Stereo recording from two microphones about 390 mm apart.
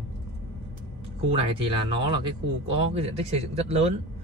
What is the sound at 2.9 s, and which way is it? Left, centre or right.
Speech, centre.